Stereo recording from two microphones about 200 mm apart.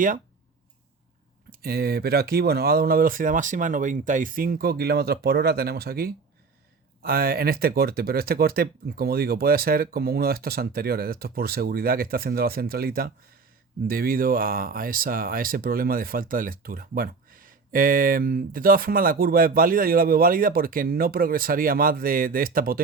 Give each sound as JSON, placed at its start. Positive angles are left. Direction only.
{"t": 1.5, "sound": "speech", "side_deg": -50}